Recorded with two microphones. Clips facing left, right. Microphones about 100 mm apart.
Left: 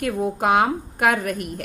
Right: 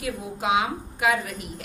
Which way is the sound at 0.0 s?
50° left (ahead or behind).